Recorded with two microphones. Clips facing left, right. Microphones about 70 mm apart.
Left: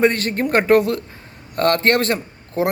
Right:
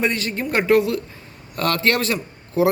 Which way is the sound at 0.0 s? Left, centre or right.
Left.